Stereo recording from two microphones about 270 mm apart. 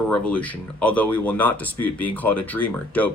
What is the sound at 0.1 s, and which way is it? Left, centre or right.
Speech, centre.